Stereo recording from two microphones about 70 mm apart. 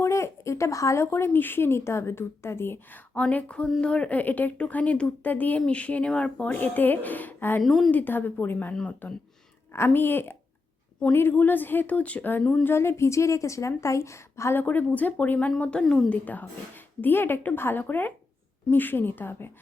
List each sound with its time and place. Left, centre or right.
0.0 s speech: left
3.2 s a sound: centre
3.8 s speech: centre
7.6 s a woman's voice: centre
7.9 s speech: left
9.7 s speech: left
12.4 s a sound: centre
12.6 s a woman's voice: left
14.6 s speech: left
15.8 s a sound: centre
16.0 s speech: left